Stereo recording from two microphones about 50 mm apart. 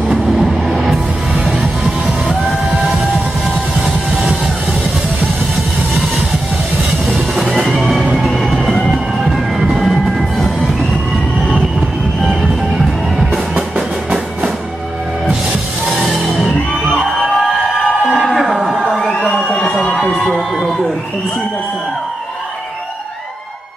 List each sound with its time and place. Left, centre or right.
0.1 s music: centre
3.8 s music: centre
8.2 s music: centre
9.8 s train: centre
13.6 s music: centre
16.0 s music: centre
18.1 s a sound: centre
19.1 s emergency vehicle: centre